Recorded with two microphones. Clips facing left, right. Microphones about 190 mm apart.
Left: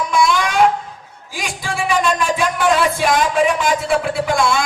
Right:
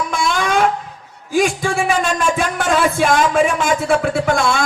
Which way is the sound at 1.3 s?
45° right (ahead or behind).